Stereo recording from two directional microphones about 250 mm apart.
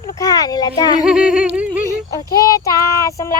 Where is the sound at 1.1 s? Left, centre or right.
Centre.